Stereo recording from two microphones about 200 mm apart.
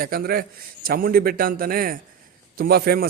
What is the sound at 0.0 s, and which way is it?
A man's voice, 50° right (ahead or behind).